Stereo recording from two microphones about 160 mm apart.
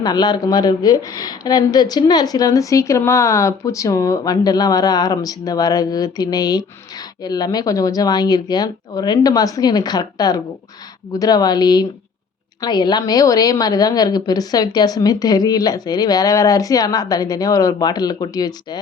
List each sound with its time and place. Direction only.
0.0 s speech: 25° left (ahead or behind)